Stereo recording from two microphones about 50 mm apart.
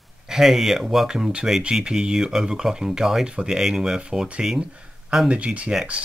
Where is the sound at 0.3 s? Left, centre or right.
Centre.